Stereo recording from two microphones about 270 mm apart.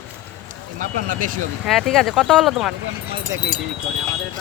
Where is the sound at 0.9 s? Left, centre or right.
Right.